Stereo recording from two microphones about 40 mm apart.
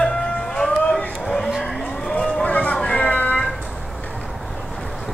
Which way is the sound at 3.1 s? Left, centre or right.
Left.